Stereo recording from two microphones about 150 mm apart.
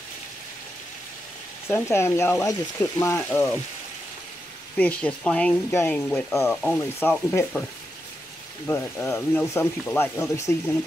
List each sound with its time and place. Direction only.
1.7 s speech: 20° left (ahead or behind)
4.7 s speech: 10° left (ahead or behind)
8.6 s speech: 15° left (ahead or behind)